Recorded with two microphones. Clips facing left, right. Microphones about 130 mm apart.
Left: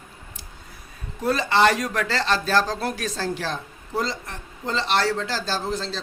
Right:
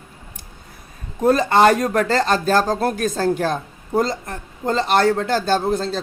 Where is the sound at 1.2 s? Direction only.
45° right (ahead or behind).